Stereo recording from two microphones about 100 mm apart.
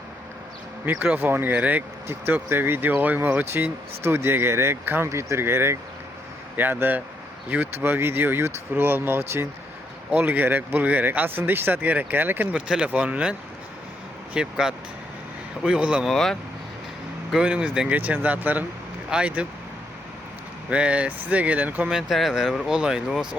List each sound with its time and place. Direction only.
0.9 s speech: 20° right (ahead or behind)
14.3 s speech: 5° right (ahead or behind)
16.0 s speech: 5° left (ahead or behind)
17.3 s speech: 10° right (ahead or behind)
20.7 s speech: 10° right (ahead or behind)